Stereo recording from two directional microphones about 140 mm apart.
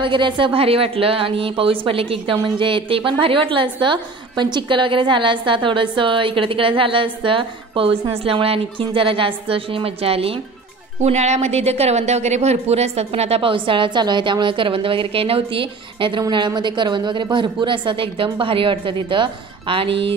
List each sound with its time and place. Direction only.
0.0 s a woman's voice: 35° right (ahead or behind)
11.0 s a woman's voice: 55° right (ahead or behind)